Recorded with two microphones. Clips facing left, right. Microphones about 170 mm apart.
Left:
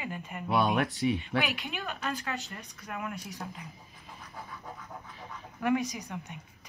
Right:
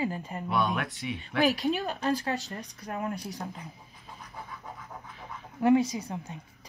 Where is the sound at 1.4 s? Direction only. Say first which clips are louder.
Right 9 dB; 40° right (ahead or behind).